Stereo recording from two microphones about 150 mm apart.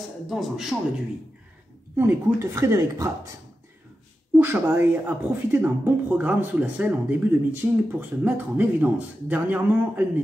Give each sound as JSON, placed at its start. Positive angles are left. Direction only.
{"t": 0.3, "sound": "a man's voice", "side_deg": 0}
{"t": 2.0, "sound": "speech", "side_deg": -15}
{"t": 4.4, "sound": "speech", "side_deg": -15}